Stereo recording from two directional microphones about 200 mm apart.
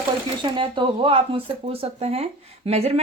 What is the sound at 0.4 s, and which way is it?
Speech, 25° right (ahead or behind).